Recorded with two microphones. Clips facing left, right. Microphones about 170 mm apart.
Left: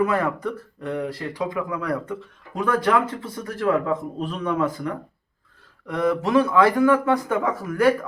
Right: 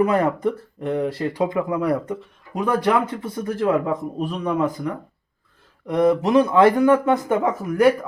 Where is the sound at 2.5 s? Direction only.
15° right (ahead or behind).